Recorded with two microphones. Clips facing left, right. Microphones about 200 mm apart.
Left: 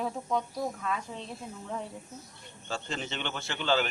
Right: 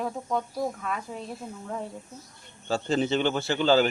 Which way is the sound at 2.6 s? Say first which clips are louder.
Right 11 dB; 35° right (ahead or behind).